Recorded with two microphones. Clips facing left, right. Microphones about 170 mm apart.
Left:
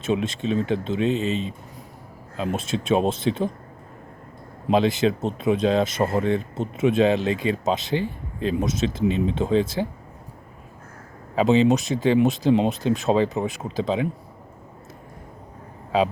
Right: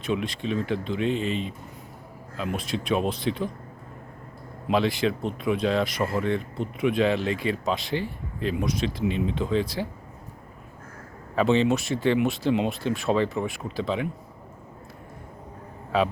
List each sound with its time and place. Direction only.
0.0 s speech: 25° left (ahead or behind)
4.7 s speech: 20° left (ahead or behind)
11.3 s speech: 20° left (ahead or behind)